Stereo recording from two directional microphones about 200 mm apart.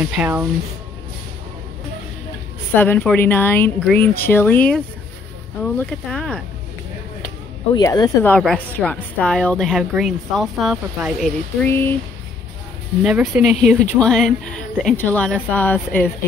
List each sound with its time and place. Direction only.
0.2 s speech: 10° right (ahead or behind)
2.7 s a woman's voice: 10° left (ahead or behind)
7.7 s speech: 20° left (ahead or behind)
8.3 s a woman's voice: 5° left (ahead or behind)
11.6 s speech: 10° left (ahead or behind)
13.0 s a woman's voice: 5° right (ahead or behind)